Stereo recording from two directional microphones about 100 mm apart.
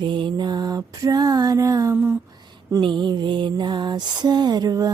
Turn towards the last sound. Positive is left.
turn(degrees=-40)  # may be behind; listen again after turning